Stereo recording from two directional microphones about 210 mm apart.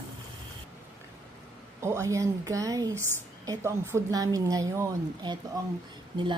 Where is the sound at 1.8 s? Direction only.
15° right (ahead or behind).